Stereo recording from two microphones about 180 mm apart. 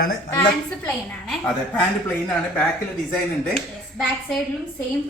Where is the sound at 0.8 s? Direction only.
10° left (ahead or behind).